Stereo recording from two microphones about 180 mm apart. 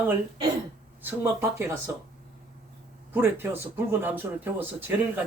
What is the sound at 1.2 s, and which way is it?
Speech, 15° right (ahead or behind).